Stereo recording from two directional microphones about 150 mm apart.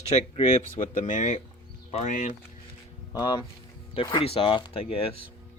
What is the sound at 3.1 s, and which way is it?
Speech, 25° left (ahead or behind).